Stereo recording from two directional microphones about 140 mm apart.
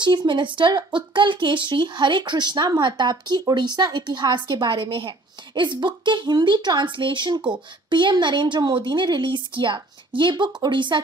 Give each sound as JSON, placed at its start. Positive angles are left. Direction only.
{"t": 0.0, "sound": "speech", "side_deg": -30}